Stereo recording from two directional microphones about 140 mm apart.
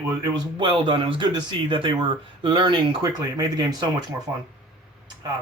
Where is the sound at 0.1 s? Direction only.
30° right (ahead or behind).